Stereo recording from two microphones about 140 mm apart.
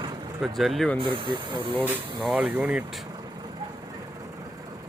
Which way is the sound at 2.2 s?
5° right (ahead or behind).